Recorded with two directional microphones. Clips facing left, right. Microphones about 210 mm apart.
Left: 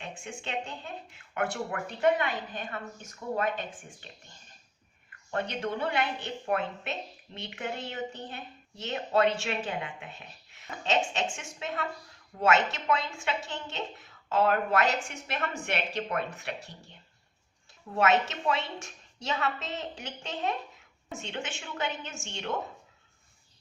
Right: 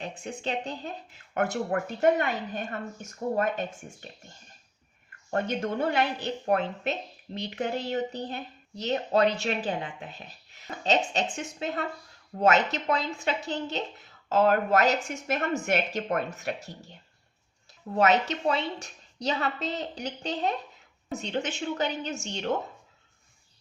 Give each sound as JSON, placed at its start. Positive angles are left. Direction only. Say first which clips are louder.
{"t": 0.0, "sound": "a woman's voice", "louder": "right 6 dB", "side_deg": -35}
{"t": 5.3, "sound": "a woman's voice", "louder": "right 3 dB", "side_deg": -45}
{"t": 17.9, "sound": "a woman's voice", "louder": "right 2 dB", "side_deg": -35}